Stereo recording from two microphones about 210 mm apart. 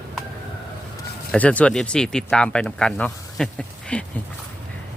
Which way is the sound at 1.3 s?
5° left (ahead or behind).